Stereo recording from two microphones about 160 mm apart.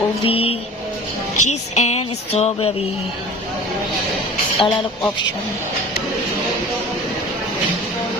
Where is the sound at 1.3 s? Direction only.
45° left (ahead or behind).